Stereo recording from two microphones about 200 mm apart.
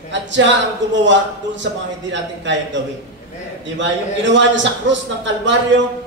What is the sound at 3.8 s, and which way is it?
Speech, 65° right (ahead or behind).